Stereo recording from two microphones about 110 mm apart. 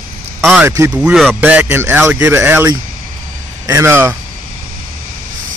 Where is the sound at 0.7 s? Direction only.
25° right (ahead or behind).